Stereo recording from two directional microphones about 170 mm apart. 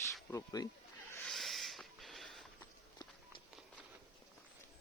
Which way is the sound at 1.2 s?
Centre (ahead or behind).